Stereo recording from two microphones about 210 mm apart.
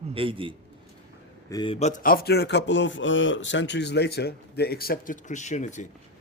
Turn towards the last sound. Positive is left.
turn(degrees=35)  # may be behind; listen again after turning